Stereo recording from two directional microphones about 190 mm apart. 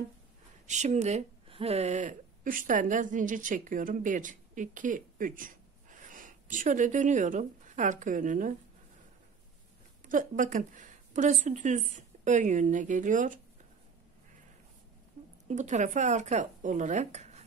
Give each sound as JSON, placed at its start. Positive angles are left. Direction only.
{"t": 0.7, "sound": "speech", "side_deg": -35}
{"t": 10.0, "sound": "a woman's voice", "side_deg": -45}
{"t": 15.4, "sound": "speech", "side_deg": -40}